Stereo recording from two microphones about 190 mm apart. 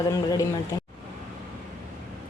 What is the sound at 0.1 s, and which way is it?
Speech, 20° left (ahead or behind).